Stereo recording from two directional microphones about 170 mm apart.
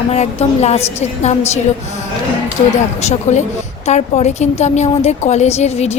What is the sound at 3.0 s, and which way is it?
A woman's voice, 40° left (ahead or behind).